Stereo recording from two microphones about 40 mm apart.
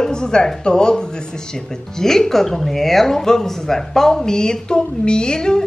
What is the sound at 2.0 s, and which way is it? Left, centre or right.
Speech, centre.